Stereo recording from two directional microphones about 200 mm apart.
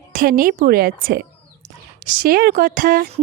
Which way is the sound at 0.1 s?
45° right (ahead or behind).